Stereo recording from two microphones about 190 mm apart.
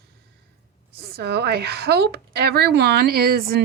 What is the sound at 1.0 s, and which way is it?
A woman's voice, 55° right (ahead or behind).